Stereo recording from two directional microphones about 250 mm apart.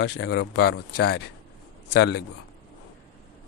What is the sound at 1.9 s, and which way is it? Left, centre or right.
Speech, left.